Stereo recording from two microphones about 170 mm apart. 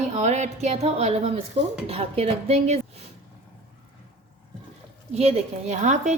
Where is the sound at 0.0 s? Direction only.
40° right (ahead or behind).